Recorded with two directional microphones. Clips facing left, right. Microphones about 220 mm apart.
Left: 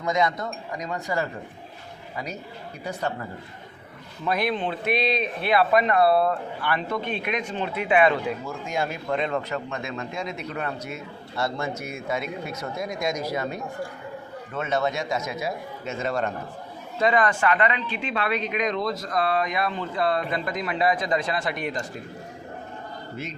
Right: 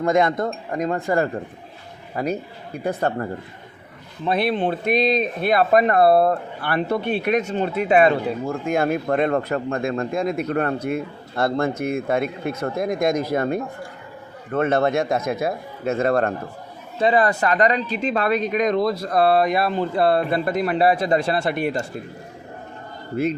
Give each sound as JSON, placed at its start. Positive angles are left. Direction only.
{"t": 0.0, "sound": "a man's voice", "side_deg": -55}
{"t": 4.3, "sound": "speech", "side_deg": -30}
{"t": 4.5, "sound": "a man's voice", "side_deg": -45}
{"t": 17.0, "sound": "speech", "side_deg": -35}